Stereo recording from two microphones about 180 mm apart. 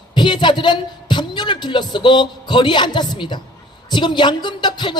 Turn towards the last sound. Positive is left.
turn(degrees=25)  # may be behind; listen again after turning